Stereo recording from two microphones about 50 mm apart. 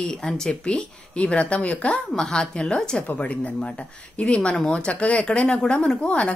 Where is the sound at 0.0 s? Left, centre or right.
Centre.